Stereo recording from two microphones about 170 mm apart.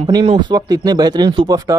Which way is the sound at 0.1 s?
30° right (ahead or behind).